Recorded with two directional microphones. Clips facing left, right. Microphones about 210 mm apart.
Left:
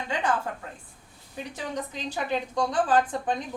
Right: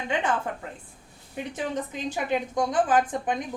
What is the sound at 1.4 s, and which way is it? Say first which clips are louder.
A woman's voice: right 3 dB; 20° right (ahead or behind).